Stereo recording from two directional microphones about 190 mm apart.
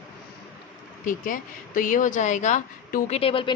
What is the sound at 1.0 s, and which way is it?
Speech, 45° left (ahead or behind).